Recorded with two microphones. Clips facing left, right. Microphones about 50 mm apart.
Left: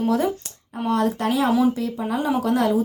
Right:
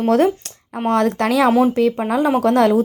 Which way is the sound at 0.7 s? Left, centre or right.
Right.